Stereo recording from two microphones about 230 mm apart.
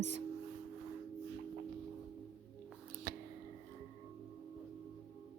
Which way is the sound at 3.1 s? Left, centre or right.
Right.